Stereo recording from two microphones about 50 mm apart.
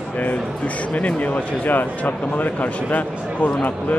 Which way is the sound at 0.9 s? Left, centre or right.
Left.